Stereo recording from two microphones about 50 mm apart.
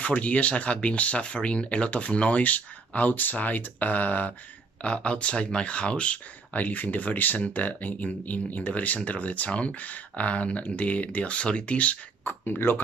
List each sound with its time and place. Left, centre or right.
0.0 s speech: left
4.8 s speech: left
12.3 s speech: left